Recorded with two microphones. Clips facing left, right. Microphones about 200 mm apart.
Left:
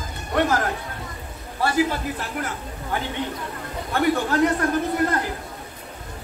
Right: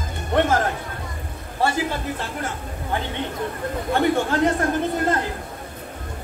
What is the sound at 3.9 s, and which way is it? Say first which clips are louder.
Speech: even; 25° right (ahead or behind).